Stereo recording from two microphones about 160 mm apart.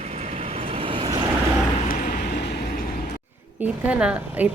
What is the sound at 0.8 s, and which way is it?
Vehicle, 35° right (ahead or behind).